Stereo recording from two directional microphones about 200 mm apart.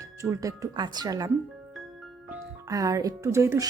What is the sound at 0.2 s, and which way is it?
Speech, 15° right (ahead or behind).